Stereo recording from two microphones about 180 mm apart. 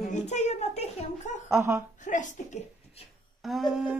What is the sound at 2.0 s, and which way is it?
Speech, 45° left (ahead or behind).